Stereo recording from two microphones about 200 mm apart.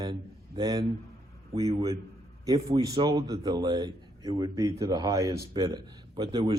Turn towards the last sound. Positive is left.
turn(degrees=-20)  # may be behind; listen again after turning